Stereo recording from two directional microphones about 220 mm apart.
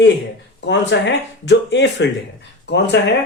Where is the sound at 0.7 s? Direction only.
55° left (ahead or behind).